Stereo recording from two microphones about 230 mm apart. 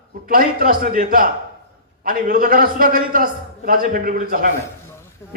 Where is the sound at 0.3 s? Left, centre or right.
Right.